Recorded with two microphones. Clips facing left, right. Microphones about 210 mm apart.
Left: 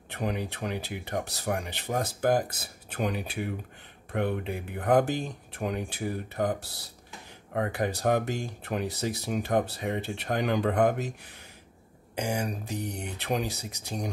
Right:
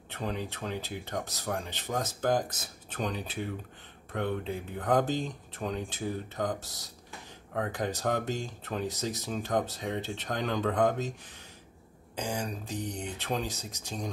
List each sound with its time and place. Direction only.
0.1 s speech: 10° left (ahead or behind)
13.5 s speech: 70° left (ahead or behind)